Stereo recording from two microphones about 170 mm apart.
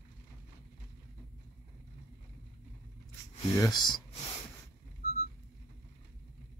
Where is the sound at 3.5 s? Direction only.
20° left (ahead or behind).